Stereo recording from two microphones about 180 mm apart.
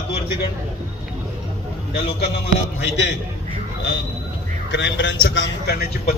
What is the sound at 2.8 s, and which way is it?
Speech, 75° left (ahead or behind).